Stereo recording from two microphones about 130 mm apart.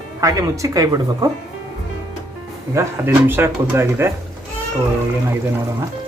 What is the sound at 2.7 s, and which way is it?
Speech, 20° right (ahead or behind).